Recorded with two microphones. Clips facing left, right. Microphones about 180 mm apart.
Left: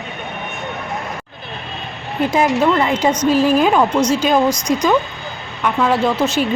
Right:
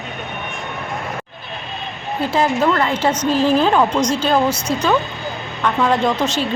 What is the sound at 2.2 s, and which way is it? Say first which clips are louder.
Speech: left 2 dB; 15° left (ahead or behind).